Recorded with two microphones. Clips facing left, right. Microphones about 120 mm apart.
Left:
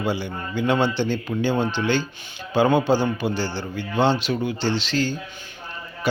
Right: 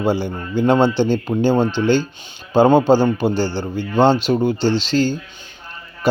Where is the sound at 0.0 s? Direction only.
40° right (ahead or behind).